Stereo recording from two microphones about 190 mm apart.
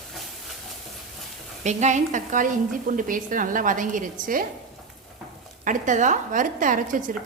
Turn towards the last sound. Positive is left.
turn(degrees=-45)  # may be behind; listen again after turning